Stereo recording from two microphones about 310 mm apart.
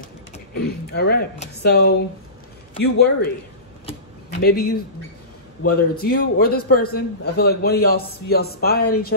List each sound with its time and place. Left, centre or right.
0.0 s speech: left
4.4 s a man's voice: left